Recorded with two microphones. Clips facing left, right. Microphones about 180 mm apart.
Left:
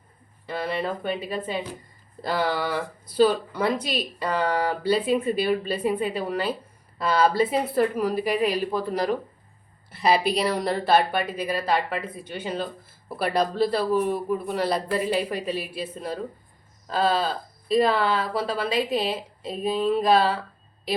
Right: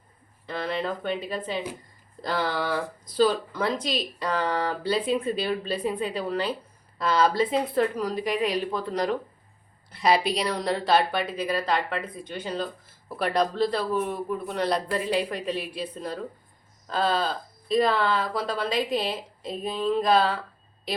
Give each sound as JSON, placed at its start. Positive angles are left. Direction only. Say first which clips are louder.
{"t": 0.4, "sound": "speech", "louder": "left 1 dB", "side_deg": 5}